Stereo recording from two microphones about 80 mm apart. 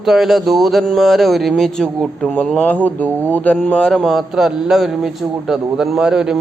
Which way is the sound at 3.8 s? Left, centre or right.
Centre.